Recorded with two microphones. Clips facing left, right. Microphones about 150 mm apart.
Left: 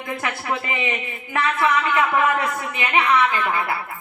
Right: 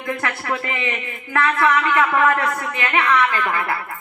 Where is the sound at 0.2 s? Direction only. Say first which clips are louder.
Right 1 dB; 20° left (ahead or behind).